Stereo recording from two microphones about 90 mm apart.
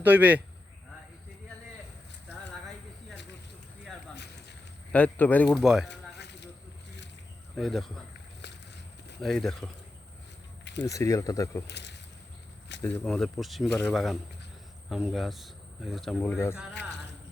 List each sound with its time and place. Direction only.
0.0 s speech: 20° right (ahead or behind)
4.9 s speech: 15° left (ahead or behind)
5.5 s speech: 5° right (ahead or behind)
7.5 s speech: centre (ahead or behind)
9.2 s speech: 5° left (ahead or behind)
10.8 s speech: 35° left (ahead or behind)
12.8 s speech: 20° left (ahead or behind)
13.1 s speech: 5° left (ahead or behind)
16.3 s speech: 30° left (ahead or behind)